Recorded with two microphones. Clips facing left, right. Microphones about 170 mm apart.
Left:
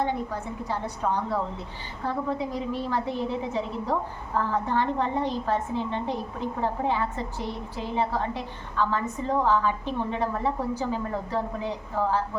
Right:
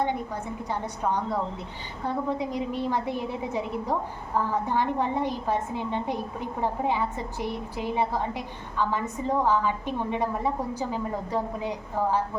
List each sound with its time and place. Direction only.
0.7 s a woman's voice: 15° right (ahead or behind)